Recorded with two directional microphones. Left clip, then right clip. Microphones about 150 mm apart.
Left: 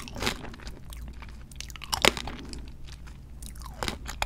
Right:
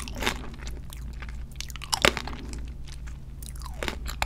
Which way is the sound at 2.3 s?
Centre (ahead or behind).